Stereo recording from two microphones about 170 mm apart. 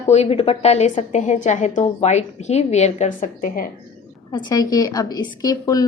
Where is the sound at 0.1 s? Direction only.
35° left (ahead or behind); by 3.7 s 55° left (ahead or behind).